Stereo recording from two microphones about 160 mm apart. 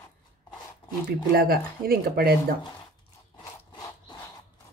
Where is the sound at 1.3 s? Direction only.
70° right (ahead or behind).